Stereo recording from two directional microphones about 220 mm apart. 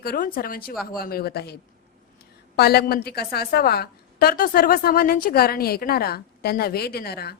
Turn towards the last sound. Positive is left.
turn(degrees=45)  # may be behind; listen again after turning